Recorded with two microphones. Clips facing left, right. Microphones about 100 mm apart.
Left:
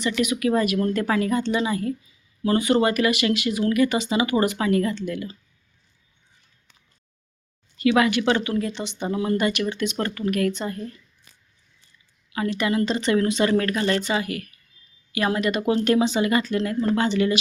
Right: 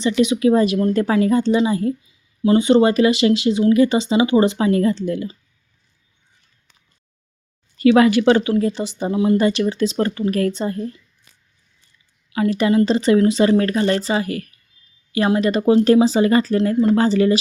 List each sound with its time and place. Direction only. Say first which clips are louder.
0.0 s a woman's voice: right 6 dB; 30° right (ahead or behind)
7.8 s speech: right 6 dB; 35° right (ahead or behind)
9.0 s a woman's voice: right 6 dB; 20° right (ahead or behind)
9.4 s speech: right 6 dB; 30° right (ahead or behind)
12.5 s speech: right 7 dB; 30° right (ahead or behind)